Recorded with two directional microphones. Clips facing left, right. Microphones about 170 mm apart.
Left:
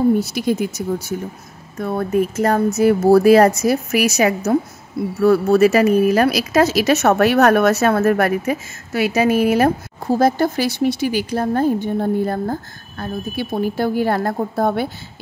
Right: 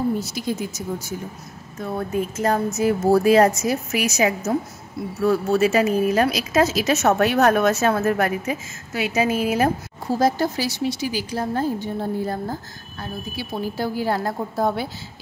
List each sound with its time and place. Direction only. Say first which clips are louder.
0.2 s speech: left 7 dB; 65° left (ahead or behind)